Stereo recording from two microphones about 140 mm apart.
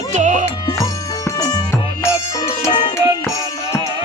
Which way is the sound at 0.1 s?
60° right (ahead or behind).